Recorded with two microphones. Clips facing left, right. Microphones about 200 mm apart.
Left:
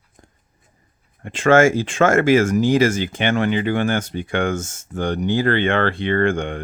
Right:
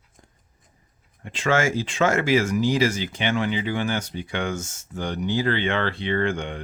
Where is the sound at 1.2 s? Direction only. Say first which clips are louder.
Left 8 dB; 50° left (ahead or behind).